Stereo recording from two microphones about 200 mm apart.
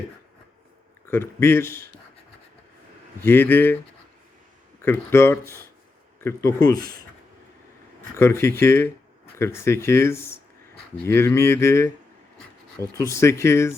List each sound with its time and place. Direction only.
1.0 s speech: 10° left (ahead or behind)
3.2 s speech: 10° left (ahead or behind)
4.8 s speech: 10° left (ahead or behind)
6.7 s speech: 50° right (ahead or behind)
8.1 s speech: 15° left (ahead or behind)